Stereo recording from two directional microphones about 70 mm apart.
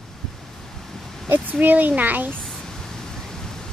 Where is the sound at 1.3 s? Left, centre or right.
Right.